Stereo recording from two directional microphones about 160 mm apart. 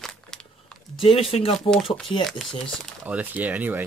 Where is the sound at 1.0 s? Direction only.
35° left (ahead or behind).